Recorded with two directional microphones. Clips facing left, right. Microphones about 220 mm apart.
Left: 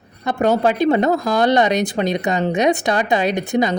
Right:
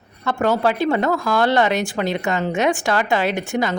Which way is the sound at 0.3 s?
20° left (ahead or behind).